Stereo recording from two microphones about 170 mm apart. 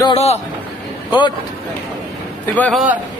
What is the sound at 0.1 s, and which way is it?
Speech, 40° left (ahead or behind).